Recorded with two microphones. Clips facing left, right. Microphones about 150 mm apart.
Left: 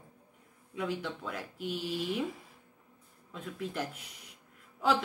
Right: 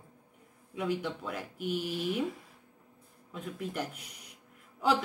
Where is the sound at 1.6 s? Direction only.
50° right (ahead or behind).